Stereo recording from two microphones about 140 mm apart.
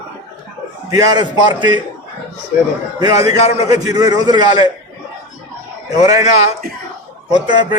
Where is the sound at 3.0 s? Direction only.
25° right (ahead or behind).